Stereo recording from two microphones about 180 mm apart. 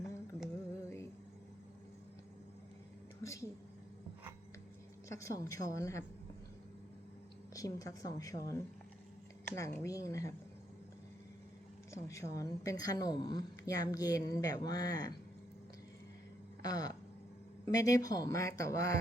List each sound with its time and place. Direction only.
0.0 s music: centre (ahead or behind)
3.2 s a woman's voice: 15° left (ahead or behind)
5.0 s a woman's voice: 15° left (ahead or behind)
7.5 s a woman's voice: 20° left (ahead or behind)
9.8 s a woman's voice: 20° left (ahead or behind)
12.0 s a woman's voice: 15° left (ahead or behind)
16.6 s a woman's voice: 20° left (ahead or behind)